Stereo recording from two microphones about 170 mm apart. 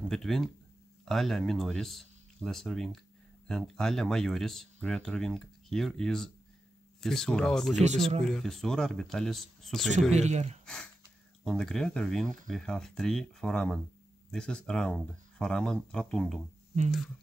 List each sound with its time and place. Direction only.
0.1 s speech: centre (ahead or behind)
10.1 s speech: 40° right (ahead or behind)
10.6 s speech: 5° left (ahead or behind)